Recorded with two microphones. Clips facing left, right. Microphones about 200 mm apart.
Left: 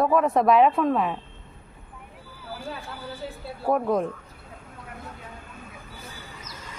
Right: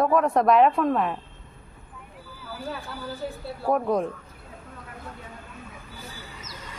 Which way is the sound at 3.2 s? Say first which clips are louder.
Right 4 dB; 55° right (ahead or behind).